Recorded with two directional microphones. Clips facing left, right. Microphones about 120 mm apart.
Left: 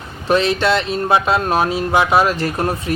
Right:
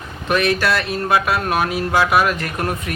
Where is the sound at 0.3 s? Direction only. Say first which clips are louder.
Left 3 dB; 25° left (ahead or behind).